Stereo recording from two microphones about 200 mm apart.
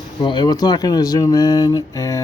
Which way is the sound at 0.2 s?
20° left (ahead or behind).